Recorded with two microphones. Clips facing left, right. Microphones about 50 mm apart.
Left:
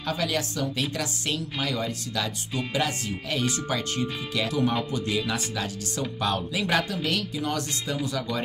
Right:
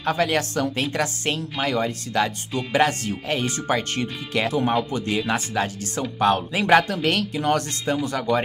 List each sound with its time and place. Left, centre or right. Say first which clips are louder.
0.0 s speech: right 6 dB; right